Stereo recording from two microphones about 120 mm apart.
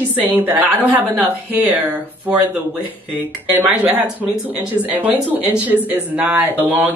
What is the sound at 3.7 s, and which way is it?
Speech, 10° right (ahead or behind).